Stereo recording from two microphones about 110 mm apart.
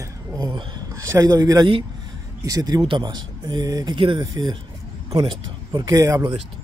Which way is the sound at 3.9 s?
50° right (ahead or behind).